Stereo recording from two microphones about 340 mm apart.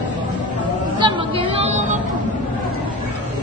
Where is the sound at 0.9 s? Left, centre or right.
Centre.